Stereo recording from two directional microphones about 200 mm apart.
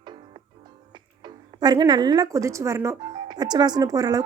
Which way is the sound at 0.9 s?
20° right (ahead or behind).